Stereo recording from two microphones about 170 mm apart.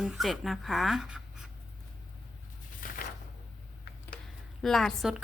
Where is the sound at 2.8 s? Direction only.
55° left (ahead or behind).